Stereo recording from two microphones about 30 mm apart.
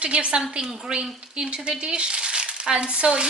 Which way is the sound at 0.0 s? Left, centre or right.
Right.